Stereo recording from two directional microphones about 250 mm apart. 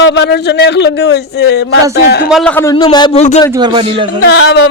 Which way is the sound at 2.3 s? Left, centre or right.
Centre.